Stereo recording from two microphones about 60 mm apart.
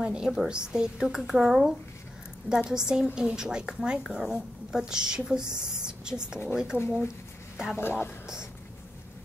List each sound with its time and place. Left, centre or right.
0.0 s a woman's voice: centre
7.7 s speech: left